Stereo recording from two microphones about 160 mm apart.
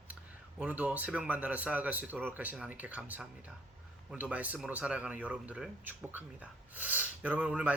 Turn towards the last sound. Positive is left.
turn(degrees=-5)  # may be behind; listen again after turning